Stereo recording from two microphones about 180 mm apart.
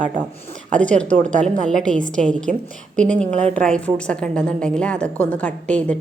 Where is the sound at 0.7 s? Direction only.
5° left (ahead or behind).